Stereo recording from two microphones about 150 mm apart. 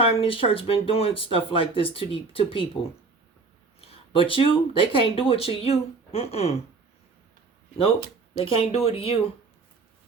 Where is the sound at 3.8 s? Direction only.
40° left (ahead or behind).